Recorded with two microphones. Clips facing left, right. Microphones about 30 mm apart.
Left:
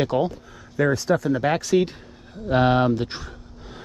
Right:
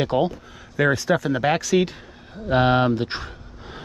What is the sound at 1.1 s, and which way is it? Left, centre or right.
Speech, right.